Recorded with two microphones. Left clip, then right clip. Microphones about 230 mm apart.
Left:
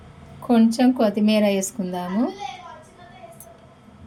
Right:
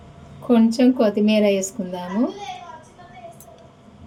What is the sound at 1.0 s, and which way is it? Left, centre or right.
Speech, left.